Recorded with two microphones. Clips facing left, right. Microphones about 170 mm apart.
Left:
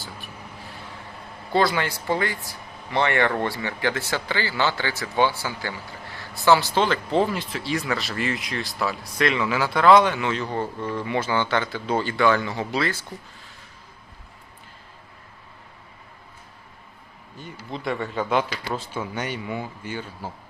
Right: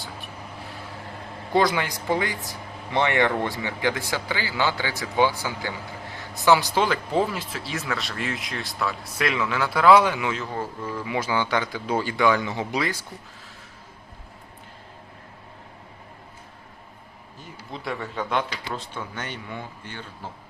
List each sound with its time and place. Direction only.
1.5 s speech: 15° right (ahead or behind)
17.3 s speech: centre (ahead or behind)